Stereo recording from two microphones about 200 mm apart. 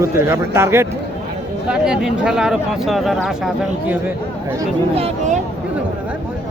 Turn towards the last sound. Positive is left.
turn(degrees=-35)  # may be behind; listen again after turning